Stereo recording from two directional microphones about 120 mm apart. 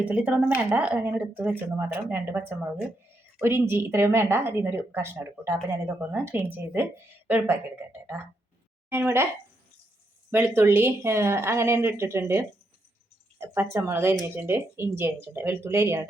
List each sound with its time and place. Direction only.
0.0 s speech: 10° right (ahead or behind)
10.3 s speech: 20° right (ahead or behind)